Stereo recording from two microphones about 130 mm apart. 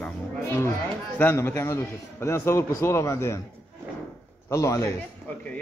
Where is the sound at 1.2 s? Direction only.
15° left (ahead or behind).